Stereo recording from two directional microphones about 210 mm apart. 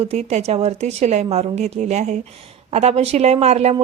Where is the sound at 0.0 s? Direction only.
30° right (ahead or behind).